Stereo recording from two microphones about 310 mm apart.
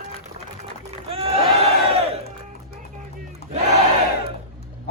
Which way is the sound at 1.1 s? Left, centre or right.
Centre.